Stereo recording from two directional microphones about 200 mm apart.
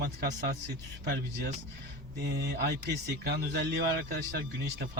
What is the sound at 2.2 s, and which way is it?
Speech, 55° right (ahead or behind).